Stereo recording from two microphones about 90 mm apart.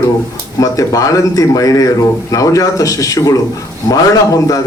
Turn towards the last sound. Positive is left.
turn(degrees=40)  # may be behind; listen again after turning